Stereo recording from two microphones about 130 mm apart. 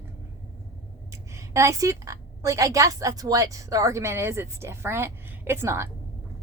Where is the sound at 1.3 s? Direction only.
20° right (ahead or behind).